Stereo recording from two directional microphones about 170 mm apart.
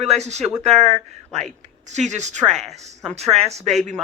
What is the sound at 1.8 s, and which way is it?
Speech, 45° right (ahead or behind).